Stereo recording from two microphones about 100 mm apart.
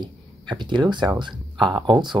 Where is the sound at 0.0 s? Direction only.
50° right (ahead or behind).